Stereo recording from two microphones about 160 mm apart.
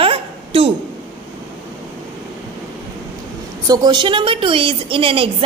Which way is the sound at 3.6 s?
25° right (ahead or behind).